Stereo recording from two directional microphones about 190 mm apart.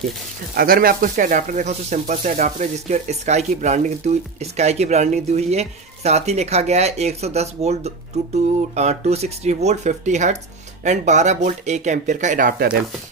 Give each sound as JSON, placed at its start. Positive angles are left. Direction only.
{"t": 0.6, "sound": "speech", "side_deg": -50}